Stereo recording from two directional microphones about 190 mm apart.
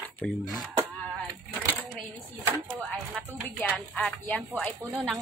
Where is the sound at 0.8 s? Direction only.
20° right (ahead or behind).